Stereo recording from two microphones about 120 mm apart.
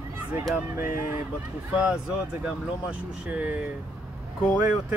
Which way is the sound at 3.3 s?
15° right (ahead or behind).